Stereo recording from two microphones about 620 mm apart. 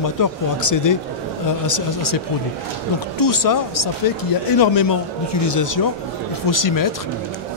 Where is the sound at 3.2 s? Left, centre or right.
Left.